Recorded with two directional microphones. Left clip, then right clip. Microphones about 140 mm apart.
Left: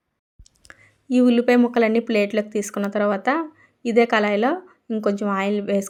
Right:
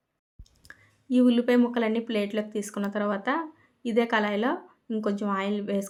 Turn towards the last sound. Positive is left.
turn(degrees=35)  # may be behind; listen again after turning